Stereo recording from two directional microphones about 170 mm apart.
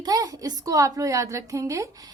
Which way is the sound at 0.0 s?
20° right (ahead or behind).